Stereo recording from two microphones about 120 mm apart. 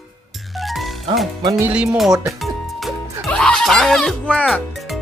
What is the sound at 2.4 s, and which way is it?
Music, centre (ahead or behind).